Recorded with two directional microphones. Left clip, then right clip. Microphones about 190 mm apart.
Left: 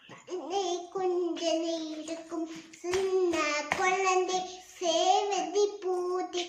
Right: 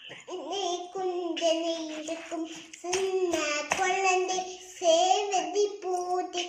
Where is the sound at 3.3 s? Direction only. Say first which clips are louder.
Even; 20° left (ahead or behind).